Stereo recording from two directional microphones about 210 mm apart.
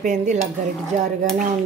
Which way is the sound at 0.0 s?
35° right (ahead or behind).